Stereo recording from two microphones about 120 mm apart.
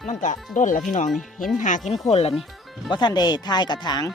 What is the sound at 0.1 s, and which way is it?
Speech, 90° left.